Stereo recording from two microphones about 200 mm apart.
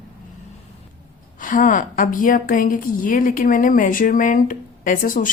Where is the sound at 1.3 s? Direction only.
40° left (ahead or behind).